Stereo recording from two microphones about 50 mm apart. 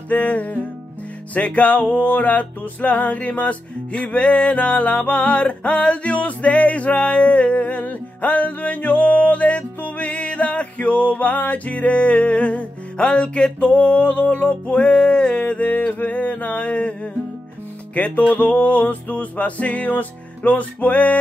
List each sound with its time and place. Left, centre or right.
0.1 s music: left